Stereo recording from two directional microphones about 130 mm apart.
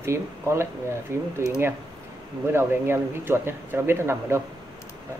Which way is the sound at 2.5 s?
15° right (ahead or behind).